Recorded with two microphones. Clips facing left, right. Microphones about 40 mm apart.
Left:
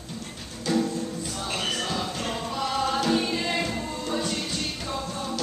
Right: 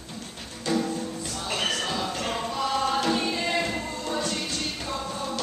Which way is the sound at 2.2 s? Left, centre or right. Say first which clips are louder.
Right 1 dB; centre.